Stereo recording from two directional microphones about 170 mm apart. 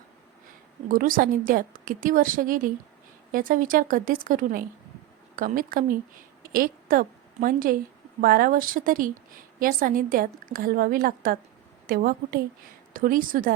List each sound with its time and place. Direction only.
0.9 s a woman's voice: 55° right (ahead or behind)